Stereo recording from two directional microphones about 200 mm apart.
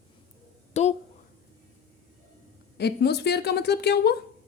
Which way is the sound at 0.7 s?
35° left (ahead or behind).